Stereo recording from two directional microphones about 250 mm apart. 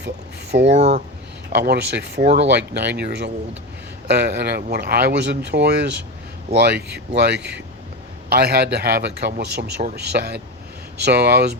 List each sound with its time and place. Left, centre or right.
0.7 s speech: right
1.5 s a man's voice: right
8.3 s a man's voice: right